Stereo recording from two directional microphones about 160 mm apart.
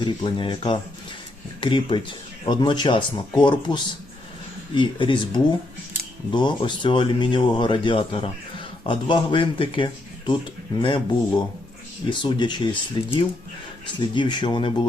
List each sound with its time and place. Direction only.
0.0 s speech: 30° left (ahead or behind)